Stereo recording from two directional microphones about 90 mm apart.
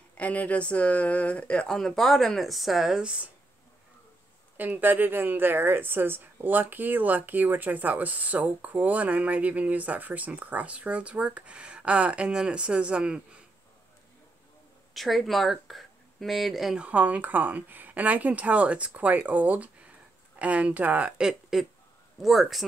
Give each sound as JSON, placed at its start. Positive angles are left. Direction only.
{"t": 0.2, "sound": "speech", "side_deg": 15}
{"t": 4.6, "sound": "speech", "side_deg": -20}
{"t": 15.0, "sound": "speech", "side_deg": 0}
{"t": 16.8, "sound": "speech", "side_deg": -15}